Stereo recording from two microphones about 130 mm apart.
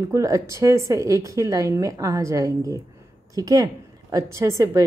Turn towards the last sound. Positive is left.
turn(degrees=-25)  # may be behind; listen again after turning